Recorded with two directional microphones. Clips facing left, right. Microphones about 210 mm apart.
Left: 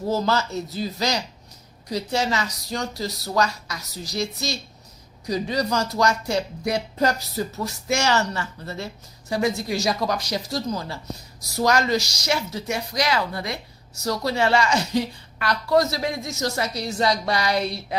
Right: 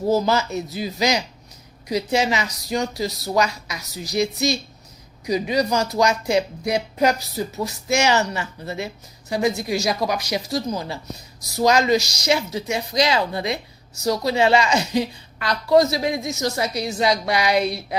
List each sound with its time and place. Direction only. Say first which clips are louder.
0.1 s speech: right 3 dB; 15° right (ahead or behind)